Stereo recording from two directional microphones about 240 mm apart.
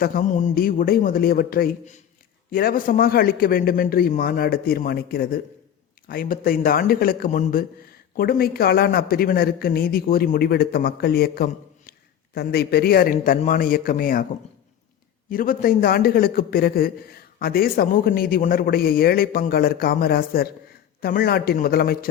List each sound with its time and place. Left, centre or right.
0.0 s a man's voice: left
15.3 s a man's voice: left